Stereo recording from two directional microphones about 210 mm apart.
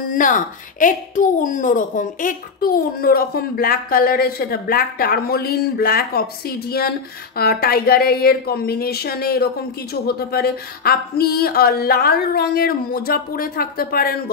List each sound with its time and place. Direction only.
0.1 s a woman's voice: 40° left (ahead or behind)